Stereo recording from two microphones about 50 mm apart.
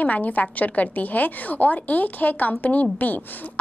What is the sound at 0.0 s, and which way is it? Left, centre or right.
A woman's voice, left.